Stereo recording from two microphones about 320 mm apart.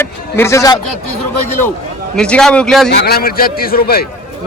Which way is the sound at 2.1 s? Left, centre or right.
Centre.